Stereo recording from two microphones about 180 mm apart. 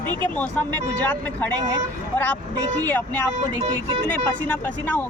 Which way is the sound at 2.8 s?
10° left (ahead or behind).